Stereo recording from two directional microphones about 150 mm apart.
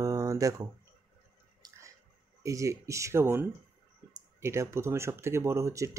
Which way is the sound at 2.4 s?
20° right (ahead or behind).